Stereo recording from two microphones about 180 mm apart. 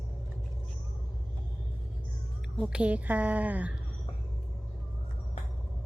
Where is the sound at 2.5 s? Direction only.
5° right (ahead or behind).